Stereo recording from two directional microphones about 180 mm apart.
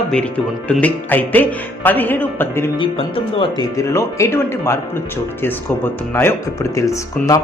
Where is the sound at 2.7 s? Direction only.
25° left (ahead or behind).